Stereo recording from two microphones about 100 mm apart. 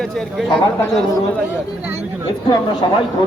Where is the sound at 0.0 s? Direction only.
5° left (ahead or behind).